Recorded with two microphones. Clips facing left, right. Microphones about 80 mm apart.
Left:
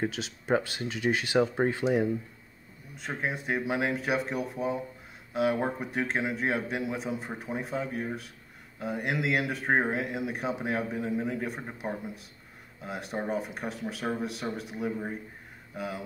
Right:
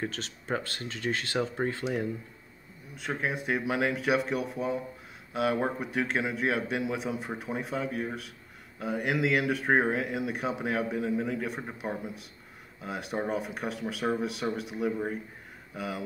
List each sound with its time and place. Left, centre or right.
0.1 s speech: centre
3.0 s a man's voice: centre
11.0 s speech: centre
11.4 s a man's voice: centre